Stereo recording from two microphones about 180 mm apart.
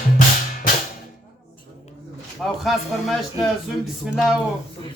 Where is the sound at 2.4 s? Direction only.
5° left (ahead or behind).